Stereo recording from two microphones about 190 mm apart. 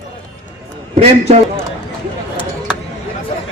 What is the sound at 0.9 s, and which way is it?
Speech, 35° right (ahead or behind).